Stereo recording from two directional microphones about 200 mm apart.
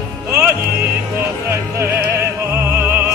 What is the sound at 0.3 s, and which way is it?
Music, 10° right (ahead or behind).